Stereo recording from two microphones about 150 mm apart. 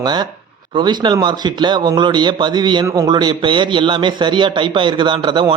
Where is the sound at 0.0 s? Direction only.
30° right (ahead or behind).